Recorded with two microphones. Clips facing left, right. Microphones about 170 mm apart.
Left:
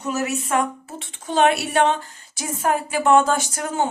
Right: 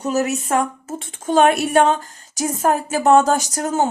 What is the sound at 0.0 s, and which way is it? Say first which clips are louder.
A woman's voice: right 4 dB; 35° right (ahead or behind).